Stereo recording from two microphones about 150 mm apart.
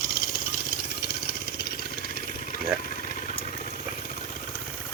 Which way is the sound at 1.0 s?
90° left.